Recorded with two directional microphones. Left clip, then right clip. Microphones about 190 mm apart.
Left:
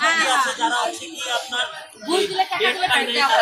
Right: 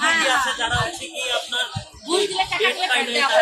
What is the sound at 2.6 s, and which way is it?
Speech, 15° right (ahead or behind).